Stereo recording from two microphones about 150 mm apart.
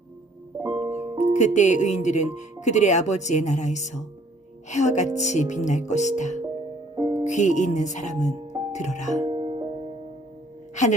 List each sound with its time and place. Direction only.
0.8 s music: 15° right (ahead or behind)
1.3 s speech: 55° left (ahead or behind)
6.9 s music: 25° right (ahead or behind)
7.3 s speech: 55° left (ahead or behind)
9.2 s music: 30° right (ahead or behind)